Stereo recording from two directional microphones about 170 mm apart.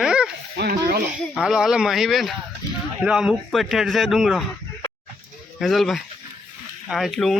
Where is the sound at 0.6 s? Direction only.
65° right (ahead or behind).